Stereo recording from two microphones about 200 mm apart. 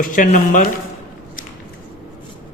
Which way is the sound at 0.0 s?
40° left (ahead or behind).